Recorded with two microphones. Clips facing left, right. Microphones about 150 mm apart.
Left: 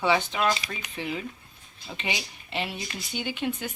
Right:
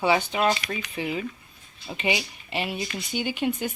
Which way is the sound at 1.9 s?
10° right (ahead or behind).